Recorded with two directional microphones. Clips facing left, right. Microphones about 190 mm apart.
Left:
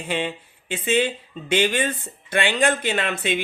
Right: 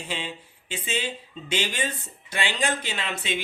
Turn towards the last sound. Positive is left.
turn(degrees=55)  # may be behind; listen again after turning